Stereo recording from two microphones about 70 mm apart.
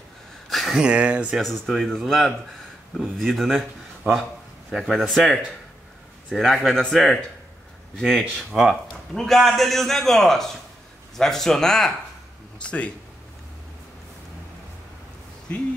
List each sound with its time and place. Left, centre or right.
0.5 s a sound: centre
0.7 s speech: centre
1.4 s a man's voice: centre
8.5 s speech: centre
8.8 s a man's voice: centre